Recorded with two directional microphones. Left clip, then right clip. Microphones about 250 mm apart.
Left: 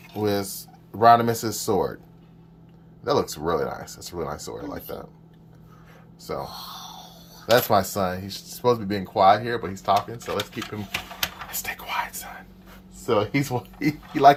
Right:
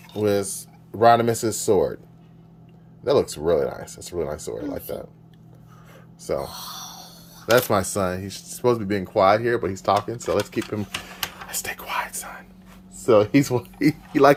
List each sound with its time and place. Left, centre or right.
0.2 s speech: centre
3.0 s speech: centre
6.5 s a sound: right
7.5 s speech: centre